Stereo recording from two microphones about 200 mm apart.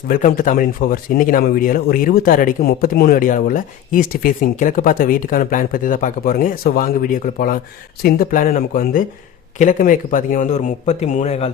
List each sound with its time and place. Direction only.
0.1 s speech: 40° left (ahead or behind)